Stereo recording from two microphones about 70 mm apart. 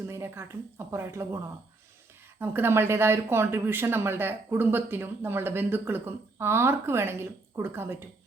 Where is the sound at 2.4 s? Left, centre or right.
Right.